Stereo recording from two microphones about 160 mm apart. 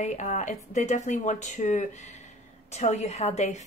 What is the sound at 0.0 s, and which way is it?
A woman's voice, 50° left (ahead or behind).